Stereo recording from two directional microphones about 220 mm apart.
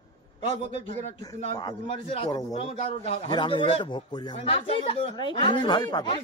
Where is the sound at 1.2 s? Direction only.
20° left (ahead or behind).